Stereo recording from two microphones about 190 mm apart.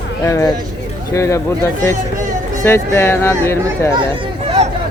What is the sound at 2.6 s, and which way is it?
Speech, 15° left (ahead or behind).